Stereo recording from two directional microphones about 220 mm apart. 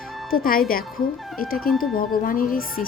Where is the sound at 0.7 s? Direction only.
40° left (ahead or behind).